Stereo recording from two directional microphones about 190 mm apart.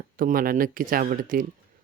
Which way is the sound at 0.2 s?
50° right (ahead or behind).